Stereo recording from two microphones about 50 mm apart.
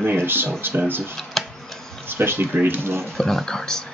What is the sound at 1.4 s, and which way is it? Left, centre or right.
Tick-tock, centre.